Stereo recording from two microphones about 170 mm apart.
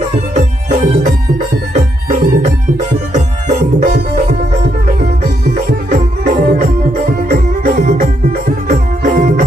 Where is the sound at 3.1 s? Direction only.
50° right (ahead or behind).